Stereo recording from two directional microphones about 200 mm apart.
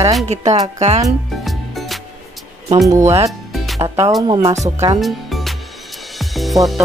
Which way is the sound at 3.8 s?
15° right (ahead or behind).